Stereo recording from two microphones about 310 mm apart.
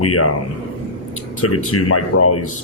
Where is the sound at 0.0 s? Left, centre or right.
Left.